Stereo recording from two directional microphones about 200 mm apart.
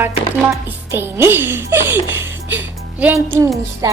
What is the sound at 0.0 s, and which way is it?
A woman's voice, 10° right (ahead or behind).